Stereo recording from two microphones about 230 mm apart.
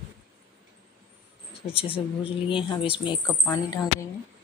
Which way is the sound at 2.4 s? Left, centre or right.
Left.